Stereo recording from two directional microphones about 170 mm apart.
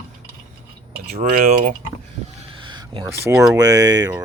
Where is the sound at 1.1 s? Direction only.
60° right (ahead or behind).